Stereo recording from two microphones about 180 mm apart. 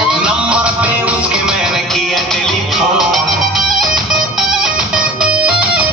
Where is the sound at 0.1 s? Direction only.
5° right (ahead or behind).